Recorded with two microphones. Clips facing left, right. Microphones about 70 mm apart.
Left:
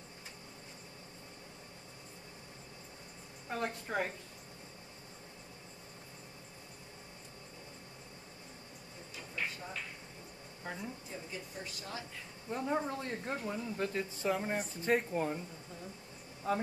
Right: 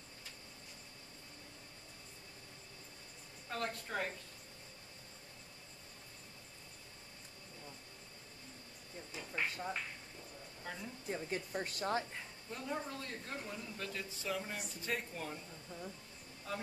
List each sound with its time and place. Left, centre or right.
3.4 s a woman's voice: centre
9.4 s a sound: right
10.6 s a sound: centre
11.1 s speech: right
12.4 s speech: left
16.5 s speech: left